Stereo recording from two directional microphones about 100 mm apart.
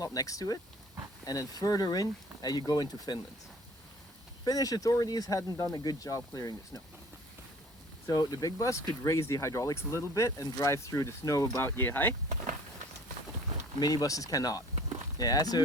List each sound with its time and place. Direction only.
0.0 s speech: 35° left (ahead or behind)
4.4 s speech: 40° left (ahead or behind)
8.0 s speech: 35° left (ahead or behind); by 12.1 s 20° left (ahead or behind)
13.7 s speech: 40° left (ahead or behind)